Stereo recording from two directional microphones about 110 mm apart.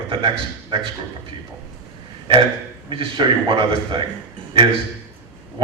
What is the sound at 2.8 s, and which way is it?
A man's voice, 50° right (ahead or behind).